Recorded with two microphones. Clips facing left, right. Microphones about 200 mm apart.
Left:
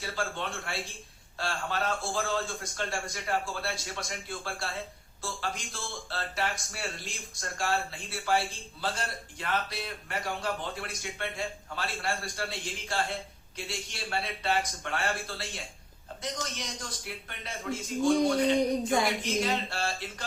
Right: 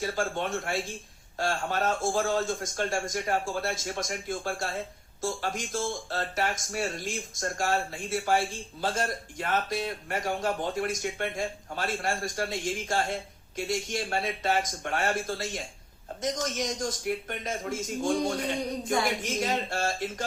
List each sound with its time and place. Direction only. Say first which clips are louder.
0.0 s speech: right 5 dB; 45° right (ahead or behind)